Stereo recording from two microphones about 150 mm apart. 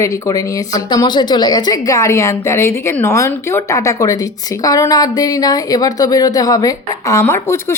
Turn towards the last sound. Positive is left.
turn(degrees=15)  # may be behind; listen again after turning